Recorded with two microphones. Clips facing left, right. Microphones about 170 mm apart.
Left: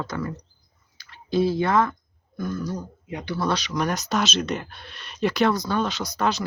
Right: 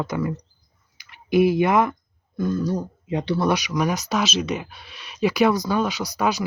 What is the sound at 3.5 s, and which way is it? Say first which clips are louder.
Speech: even; 15° right (ahead or behind).